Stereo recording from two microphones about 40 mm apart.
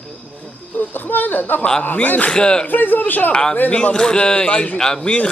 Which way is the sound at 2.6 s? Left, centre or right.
Left.